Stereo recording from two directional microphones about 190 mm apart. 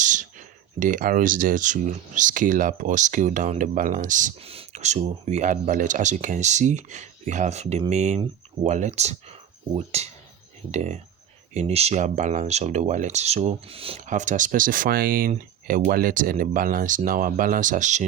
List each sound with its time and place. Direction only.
0.0 s speech: 40° right (ahead or behind)
14.1 s speech: 40° right (ahead or behind)